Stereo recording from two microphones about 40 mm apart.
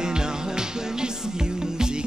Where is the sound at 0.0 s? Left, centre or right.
Centre.